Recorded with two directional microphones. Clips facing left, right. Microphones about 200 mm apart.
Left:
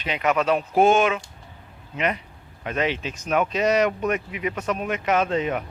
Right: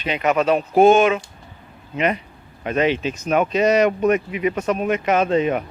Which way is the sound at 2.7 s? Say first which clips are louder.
Right 6 dB; 5° right (ahead or behind).